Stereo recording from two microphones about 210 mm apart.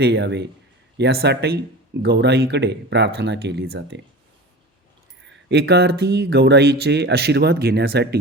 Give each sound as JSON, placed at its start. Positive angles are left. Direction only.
{"t": 0.0, "sound": "speech", "side_deg": -55}
{"t": 5.5, "sound": "speech", "side_deg": -50}